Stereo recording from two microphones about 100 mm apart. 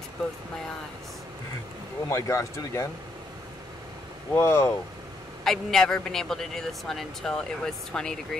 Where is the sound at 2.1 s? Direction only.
30° left (ahead or behind).